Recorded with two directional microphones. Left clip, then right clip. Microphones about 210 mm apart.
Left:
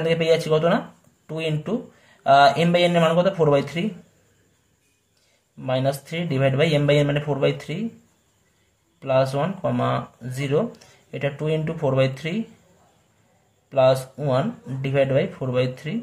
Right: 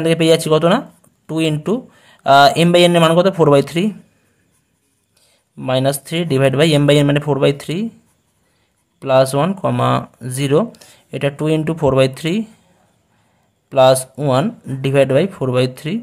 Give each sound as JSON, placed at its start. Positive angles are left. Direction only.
{"t": 0.0, "sound": "speech", "side_deg": -45}
{"t": 5.6, "sound": "speech", "side_deg": -40}
{"t": 9.0, "sound": "speech", "side_deg": -45}
{"t": 13.7, "sound": "speech", "side_deg": -40}